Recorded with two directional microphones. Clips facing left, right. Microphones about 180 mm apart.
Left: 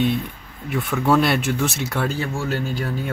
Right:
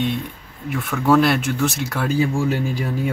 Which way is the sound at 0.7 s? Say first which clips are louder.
Right 1 dB; centre (ahead or behind).